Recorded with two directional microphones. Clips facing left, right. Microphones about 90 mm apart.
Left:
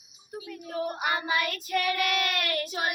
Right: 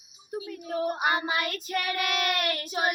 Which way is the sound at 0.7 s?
30° right (ahead or behind).